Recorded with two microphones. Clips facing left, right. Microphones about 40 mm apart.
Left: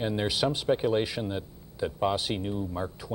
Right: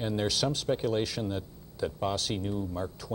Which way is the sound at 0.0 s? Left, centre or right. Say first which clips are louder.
Left 2 dB; centre.